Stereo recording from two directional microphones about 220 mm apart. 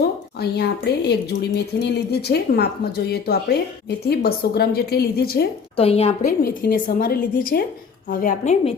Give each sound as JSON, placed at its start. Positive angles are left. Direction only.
{"t": 0.3, "sound": "a woman's voice", "side_deg": 45}
{"t": 5.7, "sound": "a woman's voice", "side_deg": 25}
{"t": 6.2, "sound": "a woman's voice", "side_deg": 40}